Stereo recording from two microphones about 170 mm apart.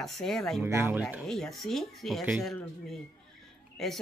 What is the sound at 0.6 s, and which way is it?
Speech, 15° right (ahead or behind).